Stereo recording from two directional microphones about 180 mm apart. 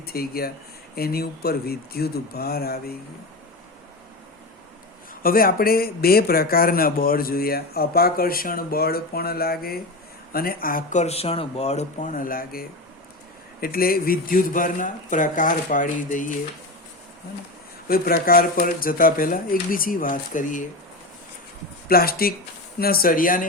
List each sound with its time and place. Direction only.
0.0 s speech: 55° left (ahead or behind)
5.2 s speech: 55° left (ahead or behind)
17.8 s speech: 55° left (ahead or behind)
21.8 s speech: 55° left (ahead or behind)